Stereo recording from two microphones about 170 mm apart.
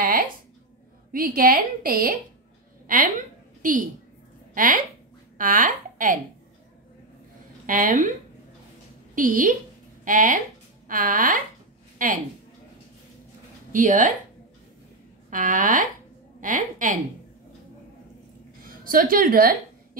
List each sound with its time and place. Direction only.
0.0 s a sound: 55° right (ahead or behind)
1.1 s a woman's voice: 55° right (ahead or behind)
3.6 s a woman's voice: 50° right (ahead or behind)
7.6 s a woman's voice: 50° right (ahead or behind)
9.1 s a woman's voice: 50° right (ahead or behind)
13.7 s a woman's voice: 50° right (ahead or behind)
15.2 s a woman's voice: 50° right (ahead or behind)
18.6 s a sound: 55° right (ahead or behind)